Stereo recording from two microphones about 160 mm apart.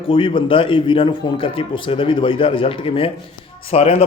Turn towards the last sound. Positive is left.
turn(degrees=40)  # may be behind; listen again after turning